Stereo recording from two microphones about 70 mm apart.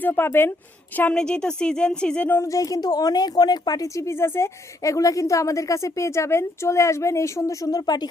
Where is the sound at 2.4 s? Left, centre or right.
Left.